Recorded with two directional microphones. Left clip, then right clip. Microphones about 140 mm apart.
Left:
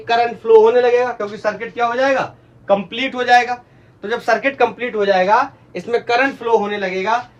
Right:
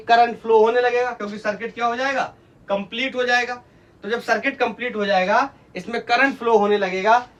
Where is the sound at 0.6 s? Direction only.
Centre (ahead or behind).